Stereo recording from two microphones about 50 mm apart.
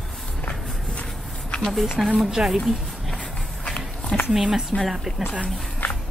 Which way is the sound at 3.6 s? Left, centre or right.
Left.